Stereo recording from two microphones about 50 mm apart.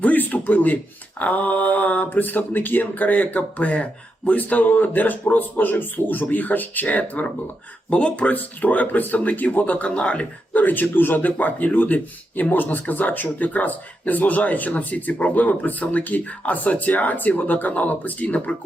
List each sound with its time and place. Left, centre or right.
0.0 s a sound: left
1.2 s speech: left
10.6 s speech: left